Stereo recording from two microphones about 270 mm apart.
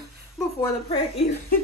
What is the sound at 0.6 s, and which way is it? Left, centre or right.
Speech, left.